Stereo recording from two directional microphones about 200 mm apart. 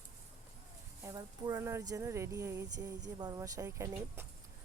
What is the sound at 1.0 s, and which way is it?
Speech, 15° right (ahead or behind).